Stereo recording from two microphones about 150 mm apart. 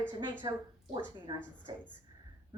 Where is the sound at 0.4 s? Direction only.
25° right (ahead or behind).